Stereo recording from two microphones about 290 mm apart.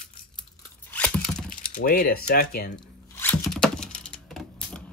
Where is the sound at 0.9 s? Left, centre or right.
Centre.